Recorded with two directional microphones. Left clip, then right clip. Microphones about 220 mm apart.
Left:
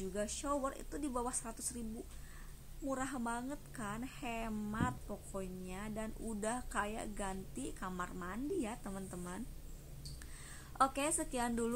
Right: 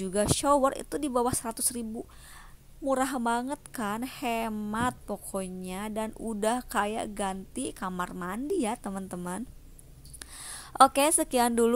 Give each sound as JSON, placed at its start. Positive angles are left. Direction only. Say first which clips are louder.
{"t": 0.0, "sound": "a woman's voice", "louder": "right 13 dB", "side_deg": -40}
{"t": 2.9, "sound": "a woman's voice", "louder": "right 13 dB", "side_deg": -35}
{"t": 10.1, "sound": "a sound", "louder": "right 10 dB", "side_deg": -40}